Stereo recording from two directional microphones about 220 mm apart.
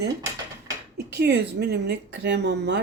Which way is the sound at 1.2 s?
50° right (ahead or behind).